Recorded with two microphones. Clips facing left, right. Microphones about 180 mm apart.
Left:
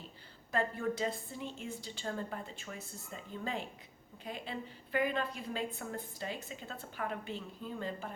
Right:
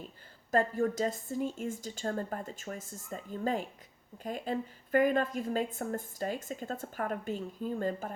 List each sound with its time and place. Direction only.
0.5 s a woman's voice: 45° right (ahead or behind)